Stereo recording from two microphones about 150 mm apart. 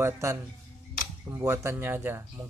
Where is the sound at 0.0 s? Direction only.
20° right (ahead or behind).